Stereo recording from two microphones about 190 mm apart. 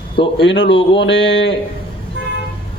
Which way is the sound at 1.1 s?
75° left (ahead or behind).